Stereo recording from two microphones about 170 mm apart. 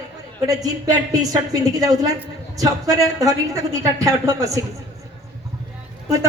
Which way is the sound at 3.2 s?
20° right (ahead or behind).